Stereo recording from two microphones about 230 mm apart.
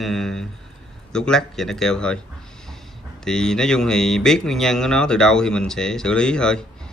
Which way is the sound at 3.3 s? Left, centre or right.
Centre.